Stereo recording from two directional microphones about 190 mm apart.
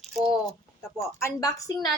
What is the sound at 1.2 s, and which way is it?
Speech, 15° left (ahead or behind).